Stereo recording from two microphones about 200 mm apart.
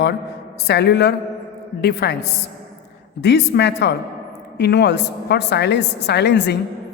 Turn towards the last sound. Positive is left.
turn(degrees=60)  # may be behind; listen again after turning